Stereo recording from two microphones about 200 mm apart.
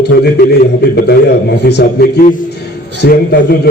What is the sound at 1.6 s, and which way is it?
A man's voice, 55° left (ahead or behind).